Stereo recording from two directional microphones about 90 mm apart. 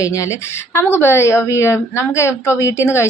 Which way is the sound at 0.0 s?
35° left (ahead or behind).